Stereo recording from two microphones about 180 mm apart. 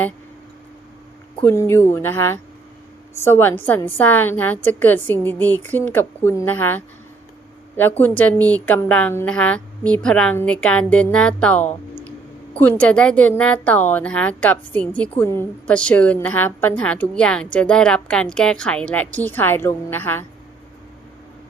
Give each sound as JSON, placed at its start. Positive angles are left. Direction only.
{"t": 1.4, "sound": "a woman's voice", "side_deg": 10}